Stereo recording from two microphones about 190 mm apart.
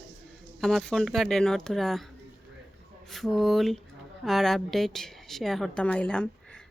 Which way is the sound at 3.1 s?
Centre (ahead or behind).